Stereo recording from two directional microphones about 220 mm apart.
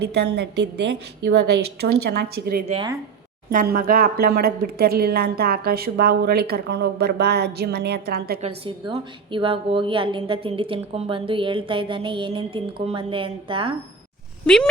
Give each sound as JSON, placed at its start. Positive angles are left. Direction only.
{"t": 0.0, "sound": "a woman's voice", "side_deg": -50}
{"t": 2.6, "sound": "a woman's voice", "side_deg": -25}
{"t": 3.5, "sound": "a woman's voice", "side_deg": -40}
{"t": 8.4, "sound": "a woman's voice", "side_deg": -25}
{"t": 14.4, "sound": "speech", "side_deg": 5}